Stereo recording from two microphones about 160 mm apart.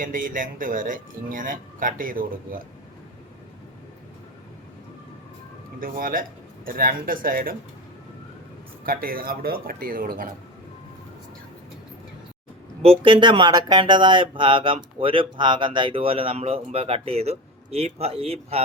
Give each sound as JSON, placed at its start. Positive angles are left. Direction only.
{"t": 0.0, "sound": "speech", "side_deg": -60}
{"t": 5.8, "sound": "speech", "side_deg": -60}
{"t": 8.9, "sound": "speech", "side_deg": -65}
{"t": 12.8, "sound": "speech", "side_deg": -35}